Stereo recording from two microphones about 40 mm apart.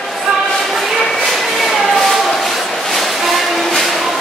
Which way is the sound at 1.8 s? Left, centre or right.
Centre.